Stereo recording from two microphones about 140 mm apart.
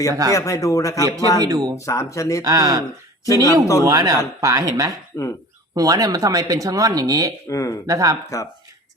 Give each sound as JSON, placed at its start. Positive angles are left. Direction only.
{"t": 0.1, "sound": "speech", "side_deg": -25}
{"t": 0.3, "sound": "a man's voice", "side_deg": 25}
{"t": 1.0, "sound": "speech", "side_deg": -25}
{"t": 1.7, "sound": "a man's voice", "side_deg": 20}
{"t": 2.4, "sound": "speech", "side_deg": -25}
{"t": 3.4, "sound": "a man's voice", "side_deg": 20}
{"t": 3.8, "sound": "speech", "side_deg": -25}
{"t": 7.5, "sound": "a man's voice", "side_deg": 25}
{"t": 7.9, "sound": "speech", "side_deg": -25}
{"t": 8.3, "sound": "a man's voice", "side_deg": 20}